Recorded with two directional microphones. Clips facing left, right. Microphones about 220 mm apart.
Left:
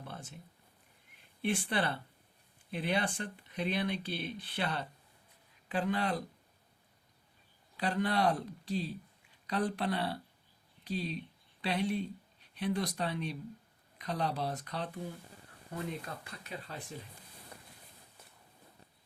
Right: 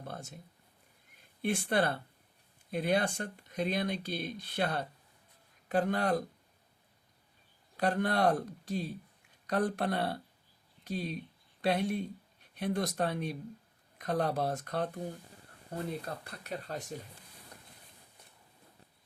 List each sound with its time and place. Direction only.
0.0 s a sound: 45° right (ahead or behind)
1.4 s speech: 45° right (ahead or behind)
7.8 s speech: 50° right (ahead or behind)